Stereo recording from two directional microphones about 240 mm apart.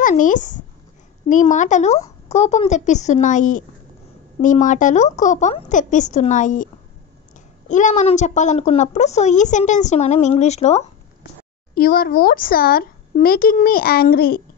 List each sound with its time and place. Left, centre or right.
0.0 s a woman's voice: left
11.7 s speech: left